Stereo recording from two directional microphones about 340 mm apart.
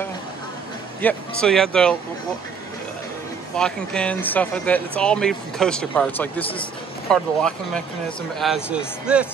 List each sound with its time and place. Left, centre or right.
1.0 s speech: centre
3.5 s speech: centre